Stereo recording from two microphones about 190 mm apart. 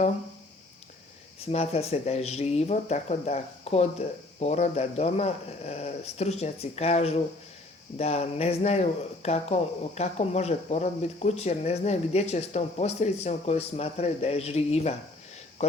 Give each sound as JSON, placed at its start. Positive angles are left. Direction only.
{"t": 1.5, "sound": "speech", "side_deg": 30}